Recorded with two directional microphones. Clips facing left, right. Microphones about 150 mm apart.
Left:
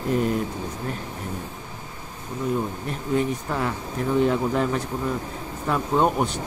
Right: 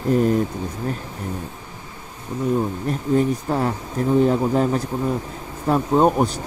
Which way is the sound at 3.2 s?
35° right (ahead or behind).